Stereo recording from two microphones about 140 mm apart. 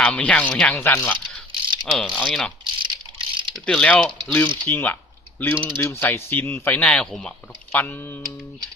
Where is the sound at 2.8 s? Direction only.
35° right (ahead or behind).